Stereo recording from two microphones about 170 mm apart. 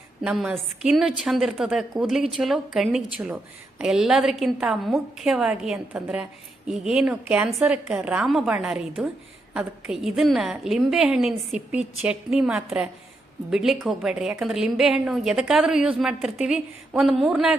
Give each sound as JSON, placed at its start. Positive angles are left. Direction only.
{"t": 0.2, "sound": "a woman's voice", "side_deg": -5}